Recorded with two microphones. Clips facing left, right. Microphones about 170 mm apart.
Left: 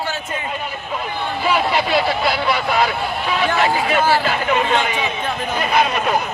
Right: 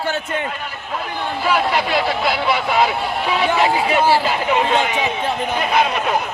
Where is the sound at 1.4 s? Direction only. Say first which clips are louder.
Even; 10° left (ahead or behind).